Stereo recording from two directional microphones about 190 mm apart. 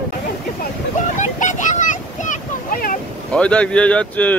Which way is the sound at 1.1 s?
40° left (ahead or behind).